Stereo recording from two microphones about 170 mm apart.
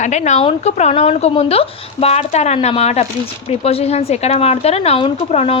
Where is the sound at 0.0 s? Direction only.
45° left (ahead or behind).